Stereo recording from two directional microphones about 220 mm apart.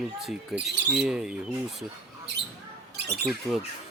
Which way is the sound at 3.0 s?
45° right (ahead or behind).